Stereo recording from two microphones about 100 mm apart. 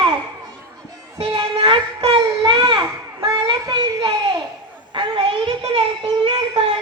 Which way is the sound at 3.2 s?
45° right (ahead or behind).